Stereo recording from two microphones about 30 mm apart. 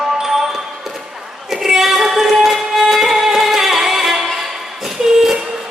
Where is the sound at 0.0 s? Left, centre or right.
Centre.